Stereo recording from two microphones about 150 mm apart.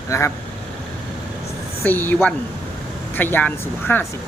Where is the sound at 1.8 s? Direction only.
10° left (ahead or behind).